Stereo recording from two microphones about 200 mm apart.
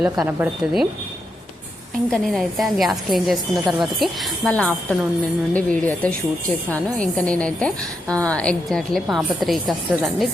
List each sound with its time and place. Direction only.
0.0 s a woman's voice: 10° right (ahead or behind)
2.0 s a woman's voice: centre (ahead or behind)